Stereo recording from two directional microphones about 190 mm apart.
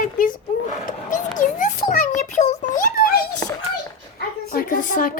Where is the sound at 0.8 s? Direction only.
40° left (ahead or behind).